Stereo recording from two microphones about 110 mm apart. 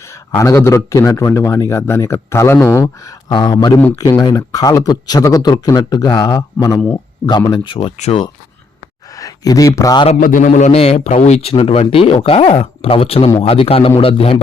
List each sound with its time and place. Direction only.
0.1 s speech: 30° left (ahead or behind)
2.8 s speech: 35° left (ahead or behind); by 7.9 s 55° left (ahead or behind)
9.1 s speech: 35° left (ahead or behind)
10.1 s a man's voice: 80° left
11.5 s speech: 60° left (ahead or behind)